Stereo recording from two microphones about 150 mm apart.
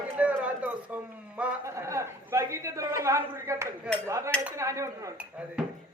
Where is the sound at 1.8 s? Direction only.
20° right (ahead or behind).